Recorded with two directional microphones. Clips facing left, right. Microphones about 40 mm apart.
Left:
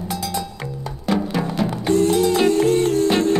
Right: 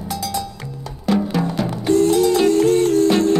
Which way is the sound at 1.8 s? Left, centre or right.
Left.